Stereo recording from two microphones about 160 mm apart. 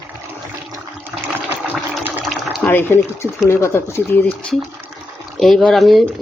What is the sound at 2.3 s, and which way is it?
Water, centre (ahead or behind).